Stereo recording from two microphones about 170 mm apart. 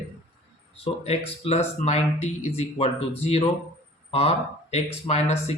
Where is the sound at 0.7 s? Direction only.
35° left (ahead or behind).